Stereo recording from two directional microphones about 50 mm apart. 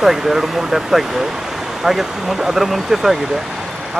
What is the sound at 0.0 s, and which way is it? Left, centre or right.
Speech, centre.